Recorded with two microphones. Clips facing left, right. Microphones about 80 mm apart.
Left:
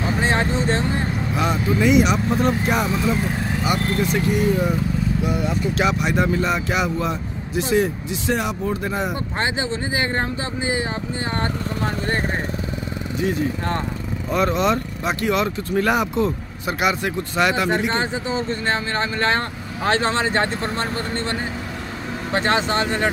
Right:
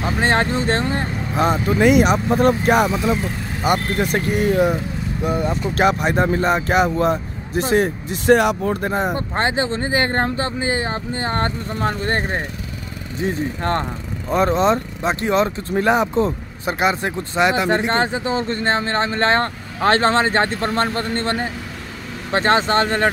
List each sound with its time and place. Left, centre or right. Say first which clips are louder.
0.2 s speech: right 4 dB; right
1.3 s speech: right 5 dB; right
1.8 s speech: right 3 dB; right
2.1 s speech: right 3 dB; right
2.4 s speech: right 8 dB; right
5.2 s speech: right 1 dB; right
14.3 s speech: right 3 dB; right
17.9 s speech: right 3 dB; right
18.6 s speech: right 3 dB; right